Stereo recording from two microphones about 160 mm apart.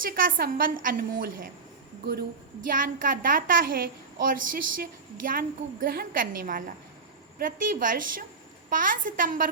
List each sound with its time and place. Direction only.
0.0 s a woman's voice: 60° right (ahead or behind)
2.6 s a woman's voice: 60° right (ahead or behind)